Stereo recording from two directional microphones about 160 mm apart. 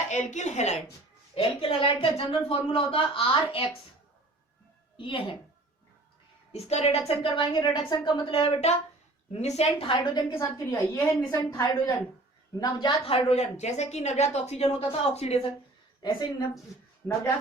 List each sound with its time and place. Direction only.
0.1 s speech: 50° left (ahead or behind)
1.4 s a woman's voice: 35° left (ahead or behind)
4.9 s a woman's voice: 30° left (ahead or behind)
6.5 s a woman's voice: 40° left (ahead or behind)
9.9 s a woman's voice: 30° left (ahead or behind)
13.1 s a woman's voice: 40° left (ahead or behind)